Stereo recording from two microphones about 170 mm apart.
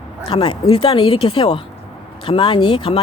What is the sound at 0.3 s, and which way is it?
A woman's voice, 30° left (ahead or behind).